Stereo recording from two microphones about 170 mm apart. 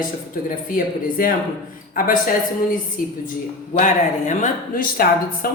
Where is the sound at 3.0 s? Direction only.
55° left (ahead or behind).